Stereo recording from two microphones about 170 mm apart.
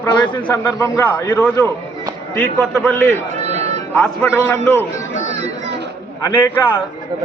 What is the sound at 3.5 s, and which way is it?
Music, 40° right (ahead or behind).